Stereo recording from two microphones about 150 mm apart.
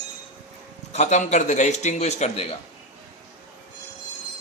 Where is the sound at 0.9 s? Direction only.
50° left (ahead or behind).